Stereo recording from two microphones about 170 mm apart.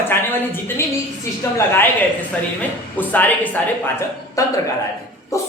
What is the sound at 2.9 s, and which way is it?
Speech, 10° left (ahead or behind).